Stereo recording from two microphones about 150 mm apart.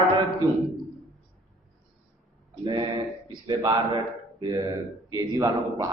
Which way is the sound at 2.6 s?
30° right (ahead or behind).